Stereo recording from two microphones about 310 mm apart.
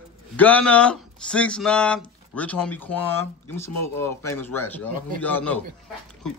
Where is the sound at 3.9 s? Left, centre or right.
Centre.